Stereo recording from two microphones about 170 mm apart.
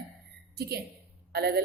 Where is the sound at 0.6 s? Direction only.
65° right (ahead or behind).